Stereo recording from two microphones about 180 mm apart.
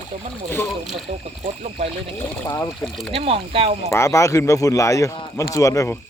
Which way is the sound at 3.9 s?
15° left (ahead or behind).